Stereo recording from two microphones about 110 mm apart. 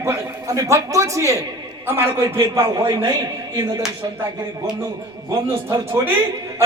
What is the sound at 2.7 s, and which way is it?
Speech, 40° right (ahead or behind).